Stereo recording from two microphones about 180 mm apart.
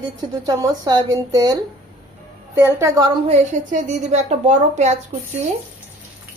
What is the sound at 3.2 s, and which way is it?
A woman's voice, 40° right (ahead or behind).